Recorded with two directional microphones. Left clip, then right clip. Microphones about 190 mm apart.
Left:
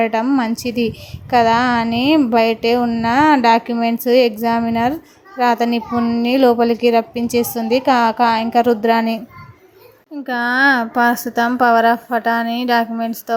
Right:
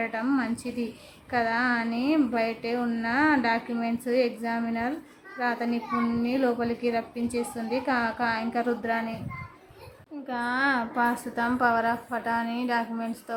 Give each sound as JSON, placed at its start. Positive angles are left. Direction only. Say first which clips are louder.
{"t": 0.0, "sound": "a child's voice", "louder": "left 12 dB", "side_deg": 30}
{"t": 10.2, "sound": "a child's voice", "louder": "left 12 dB", "side_deg": 35}